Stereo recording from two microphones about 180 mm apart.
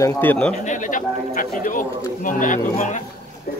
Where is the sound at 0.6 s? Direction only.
45° left (ahead or behind).